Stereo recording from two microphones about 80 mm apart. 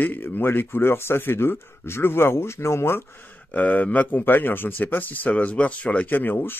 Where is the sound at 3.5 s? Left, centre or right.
Centre.